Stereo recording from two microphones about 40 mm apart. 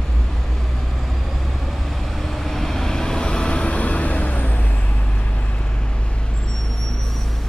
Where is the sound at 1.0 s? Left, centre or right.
Centre; by 5.2 s left.